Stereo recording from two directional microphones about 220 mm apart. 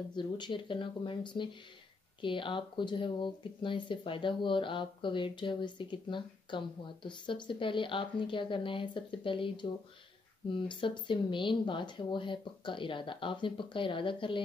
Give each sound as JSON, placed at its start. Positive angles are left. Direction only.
{"t": 0.1, "sound": "speech", "side_deg": 20}